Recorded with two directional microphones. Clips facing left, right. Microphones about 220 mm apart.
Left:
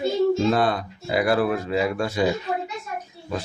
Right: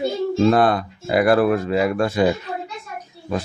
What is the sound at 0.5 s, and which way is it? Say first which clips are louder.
Speech: right 5 dB; 55° right (ahead or behind).